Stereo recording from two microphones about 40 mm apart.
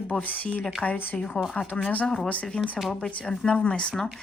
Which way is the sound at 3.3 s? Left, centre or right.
Left.